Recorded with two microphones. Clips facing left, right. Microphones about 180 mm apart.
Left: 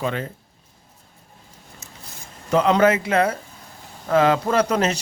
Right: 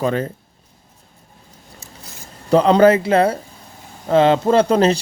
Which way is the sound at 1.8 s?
35° right (ahead or behind).